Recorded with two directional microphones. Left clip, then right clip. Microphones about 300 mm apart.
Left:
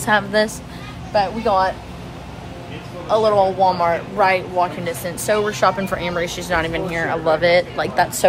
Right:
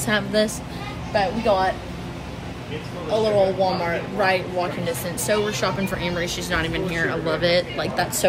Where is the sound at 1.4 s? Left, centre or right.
Left.